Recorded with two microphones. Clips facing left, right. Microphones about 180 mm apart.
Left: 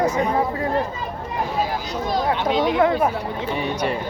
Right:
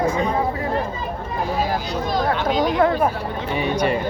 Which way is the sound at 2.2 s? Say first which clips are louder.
Left 1 dB; 25° left (ahead or behind).